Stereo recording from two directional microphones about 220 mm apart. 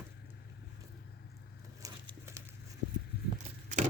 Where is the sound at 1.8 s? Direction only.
15° right (ahead or behind).